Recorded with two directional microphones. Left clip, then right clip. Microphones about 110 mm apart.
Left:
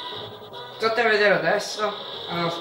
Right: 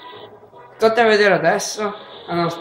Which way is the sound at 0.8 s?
35° right (ahead or behind).